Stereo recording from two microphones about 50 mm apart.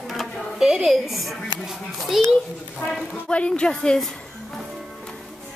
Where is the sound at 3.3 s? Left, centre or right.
Left.